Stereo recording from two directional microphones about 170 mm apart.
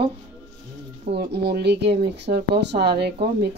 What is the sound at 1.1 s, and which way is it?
Speech, 75° right (ahead or behind).